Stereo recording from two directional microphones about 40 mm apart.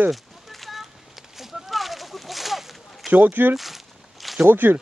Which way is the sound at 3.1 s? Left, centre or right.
Right.